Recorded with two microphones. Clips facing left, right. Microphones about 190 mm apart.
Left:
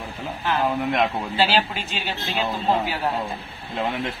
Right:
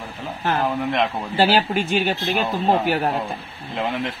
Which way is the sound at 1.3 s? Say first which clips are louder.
Right 4 dB; 50° right (ahead or behind).